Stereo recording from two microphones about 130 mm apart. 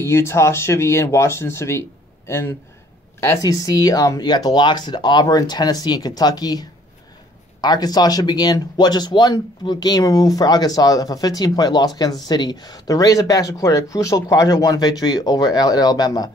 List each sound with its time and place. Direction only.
0.0 s speech: 20° left (ahead or behind)